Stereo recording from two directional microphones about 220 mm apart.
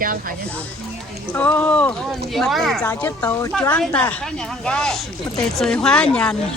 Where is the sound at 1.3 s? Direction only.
5° left (ahead or behind).